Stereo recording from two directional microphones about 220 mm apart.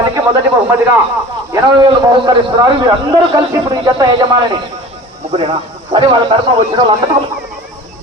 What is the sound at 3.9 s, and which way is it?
Speech, 20° right (ahead or behind).